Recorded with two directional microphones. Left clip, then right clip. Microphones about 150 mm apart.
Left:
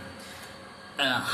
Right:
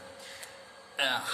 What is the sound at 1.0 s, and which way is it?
Speech, 40° right (ahead or behind).